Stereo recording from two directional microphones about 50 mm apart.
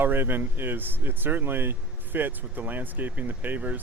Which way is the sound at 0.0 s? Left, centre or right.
Right.